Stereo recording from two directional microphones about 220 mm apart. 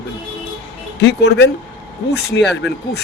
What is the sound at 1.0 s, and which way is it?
Speech, 50° left (ahead or behind).